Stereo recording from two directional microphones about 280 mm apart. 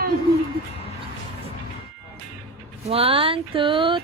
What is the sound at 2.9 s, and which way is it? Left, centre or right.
Speech, centre.